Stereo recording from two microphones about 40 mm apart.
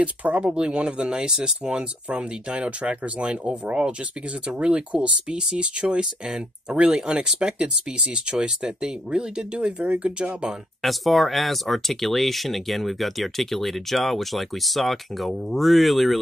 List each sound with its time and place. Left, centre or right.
0.0 s speech: right
6.2 s speech: centre
6.8 s speech: right
10.8 s speech: centre